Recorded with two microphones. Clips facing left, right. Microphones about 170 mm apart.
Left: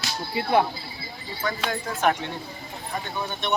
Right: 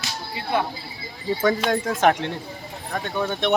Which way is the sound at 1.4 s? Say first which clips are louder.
Right 7 dB; 75° right (ahead or behind).